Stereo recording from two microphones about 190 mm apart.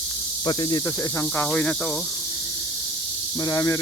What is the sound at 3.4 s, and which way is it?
Speech, 15° left (ahead or behind).